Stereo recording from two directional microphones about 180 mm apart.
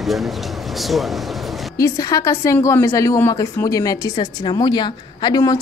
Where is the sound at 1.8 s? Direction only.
20° left (ahead or behind).